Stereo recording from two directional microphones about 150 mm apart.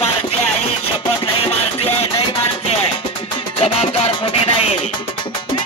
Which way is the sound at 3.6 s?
45° left (ahead or behind).